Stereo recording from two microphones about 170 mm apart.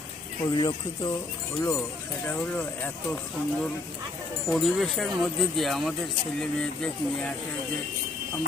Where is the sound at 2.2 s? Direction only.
10° left (ahead or behind).